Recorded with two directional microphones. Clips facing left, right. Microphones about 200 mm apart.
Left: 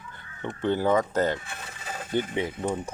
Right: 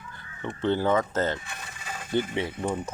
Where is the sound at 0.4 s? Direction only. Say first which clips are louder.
Even; 15° left (ahead or behind).